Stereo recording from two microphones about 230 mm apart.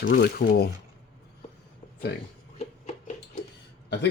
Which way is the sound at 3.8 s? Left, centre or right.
Left.